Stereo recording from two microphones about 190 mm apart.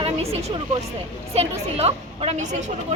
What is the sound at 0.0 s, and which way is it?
Speech, 30° right (ahead or behind).